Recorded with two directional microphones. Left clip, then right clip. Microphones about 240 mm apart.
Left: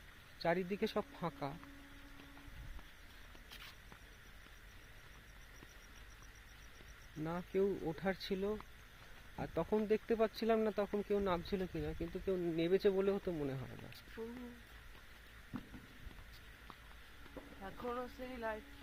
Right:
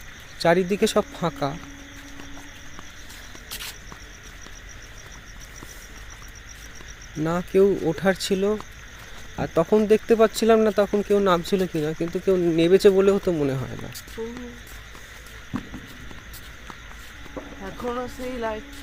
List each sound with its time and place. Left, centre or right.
0.4 s speech: centre
7.2 s speech: centre
14.2 s speech: left
17.7 s speech: left